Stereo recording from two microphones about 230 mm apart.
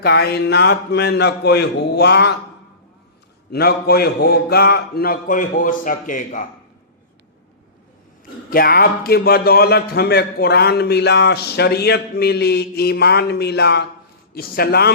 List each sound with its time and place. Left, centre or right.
0.0 s a man's voice: left
3.5 s a man's voice: left
8.4 s a man's voice: left